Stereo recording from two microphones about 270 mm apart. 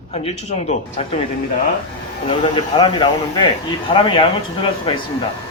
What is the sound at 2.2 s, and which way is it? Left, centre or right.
Speech, centre.